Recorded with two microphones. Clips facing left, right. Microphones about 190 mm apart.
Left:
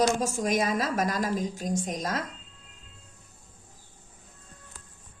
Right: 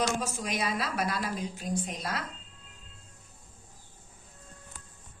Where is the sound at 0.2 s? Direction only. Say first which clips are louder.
Left 6 dB; 45° left (ahead or behind).